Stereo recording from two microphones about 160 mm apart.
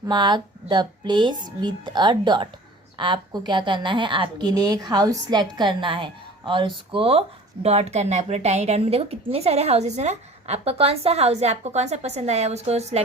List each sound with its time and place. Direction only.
0.1 s a woman's voice: 25° right (ahead or behind); by 13.0 s 45° right (ahead or behind)